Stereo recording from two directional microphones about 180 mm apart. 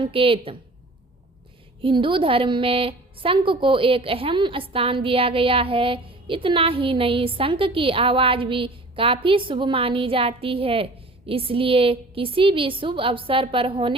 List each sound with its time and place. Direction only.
0.0 s a woman's voice: 30° right (ahead or behind)
1.8 s a woman's voice: 30° right (ahead or behind)